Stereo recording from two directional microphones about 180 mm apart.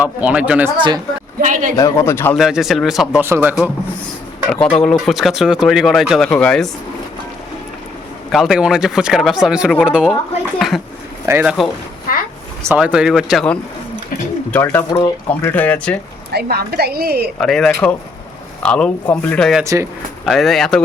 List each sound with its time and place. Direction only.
0.0 s speech: 10° right (ahead or behind)
0.8 s a man's voice: 25° right (ahead or behind)
1.4 s a man's voice: 45° right (ahead or behind)
1.7 s a man's voice: 20° left (ahead or behind)
2.4 s speech: centre (ahead or behind)
4.6 s speech: 5° left (ahead or behind)
8.3 s speech: centre (ahead or behind)
10.6 s a sound: centre (ahead or behind)
11.3 s speech: 10° right (ahead or behind)
12.6 s a man's voice: 5° right (ahead or behind)
16.3 s a woman's voice: 65° right (ahead or behind)
17.4 s speech: 5° left (ahead or behind)
19.6 s speech: 15° right (ahead or behind)
20.2 s speech: centre (ahead or behind)